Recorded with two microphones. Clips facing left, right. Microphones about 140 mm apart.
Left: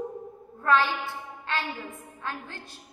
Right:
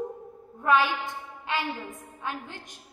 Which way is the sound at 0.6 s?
15° right (ahead or behind).